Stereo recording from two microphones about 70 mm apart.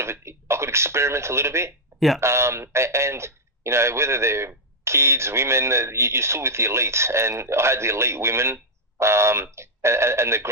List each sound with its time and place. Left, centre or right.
0.0 s a man's voice: right